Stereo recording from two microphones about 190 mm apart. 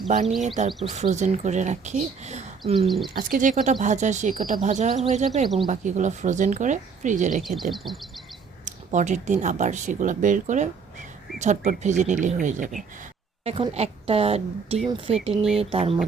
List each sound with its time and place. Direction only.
0.1 s speech: 40° right (ahead or behind)
2.7 s speech: centre (ahead or behind)
3.2 s speech: 45° right (ahead or behind)
7.4 s speech: centre (ahead or behind)
8.6 s speech: 40° right (ahead or behind)
13.4 s speech: 30° right (ahead or behind)
15.3 s speech: centre (ahead or behind)
15.7 s speech: 30° right (ahead or behind)